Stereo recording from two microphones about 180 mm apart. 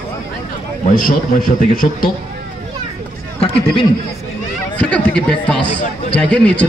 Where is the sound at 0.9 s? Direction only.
50° left (ahead or behind).